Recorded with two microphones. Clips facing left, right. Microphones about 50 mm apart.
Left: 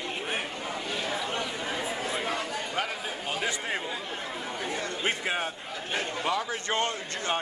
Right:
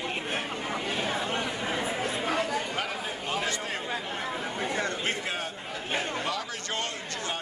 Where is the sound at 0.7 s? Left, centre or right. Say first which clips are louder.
Right 3 dB; right.